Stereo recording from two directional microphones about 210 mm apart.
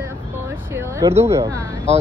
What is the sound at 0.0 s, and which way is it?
Vehicle, 10° right (ahead or behind).